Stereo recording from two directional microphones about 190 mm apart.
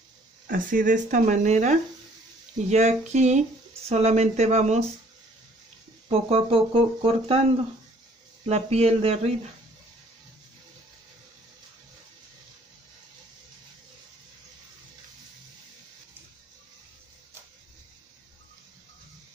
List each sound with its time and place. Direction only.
0.5 s speech: 45° right (ahead or behind)
6.0 s speech: 30° right (ahead or behind)
8.5 s speech: 35° right (ahead or behind)